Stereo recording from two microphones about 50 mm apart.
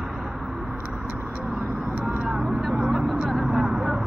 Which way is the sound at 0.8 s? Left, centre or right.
Right.